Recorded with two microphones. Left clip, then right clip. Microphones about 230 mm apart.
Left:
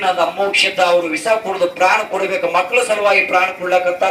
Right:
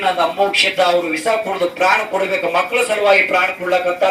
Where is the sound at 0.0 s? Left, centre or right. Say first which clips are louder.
Even; left.